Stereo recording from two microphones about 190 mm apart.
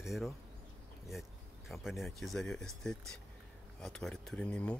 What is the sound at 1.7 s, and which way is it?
Speech, centre (ahead or behind).